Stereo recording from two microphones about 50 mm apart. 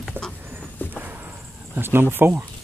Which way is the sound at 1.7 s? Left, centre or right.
Right.